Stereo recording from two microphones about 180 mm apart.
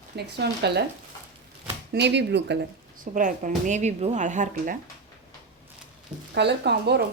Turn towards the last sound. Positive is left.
turn(degrees=-70)  # may be behind; listen again after turning